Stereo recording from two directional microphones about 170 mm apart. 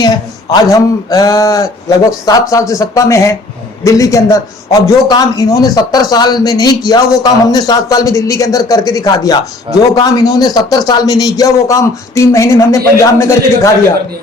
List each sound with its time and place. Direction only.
0.0 s a man's voice: 25° left (ahead or behind)